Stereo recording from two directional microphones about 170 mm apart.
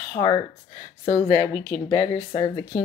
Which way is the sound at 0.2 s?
30° left (ahead or behind).